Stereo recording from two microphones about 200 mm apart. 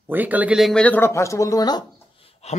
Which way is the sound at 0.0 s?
10° right (ahead or behind).